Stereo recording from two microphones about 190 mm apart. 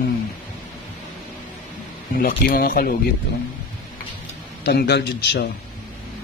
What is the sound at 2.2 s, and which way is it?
Speech, 50° left (ahead or behind).